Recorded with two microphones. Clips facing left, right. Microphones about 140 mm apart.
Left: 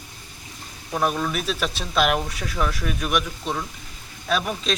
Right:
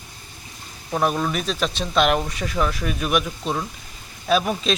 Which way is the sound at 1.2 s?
Centre (ahead or behind).